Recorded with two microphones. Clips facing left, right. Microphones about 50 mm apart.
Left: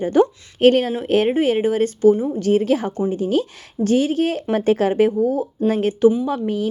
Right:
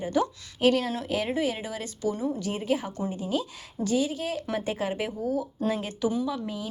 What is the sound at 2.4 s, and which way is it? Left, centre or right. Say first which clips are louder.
A woman's voice: left 11 dB; left.